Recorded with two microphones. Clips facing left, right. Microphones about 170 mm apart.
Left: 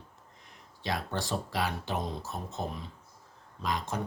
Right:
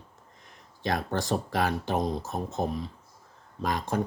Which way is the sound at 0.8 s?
45° right (ahead or behind).